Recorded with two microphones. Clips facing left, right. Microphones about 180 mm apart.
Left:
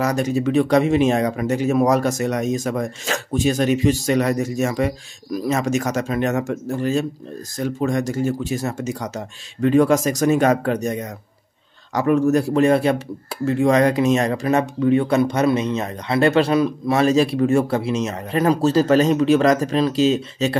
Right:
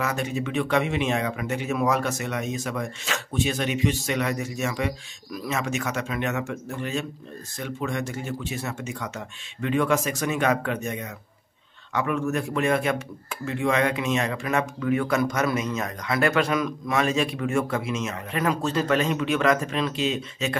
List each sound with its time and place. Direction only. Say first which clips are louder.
0.0 s speech: left 8 dB; 40° left (ahead or behind)